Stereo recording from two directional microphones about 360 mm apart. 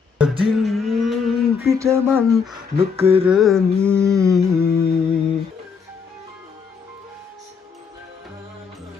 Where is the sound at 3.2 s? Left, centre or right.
Centre.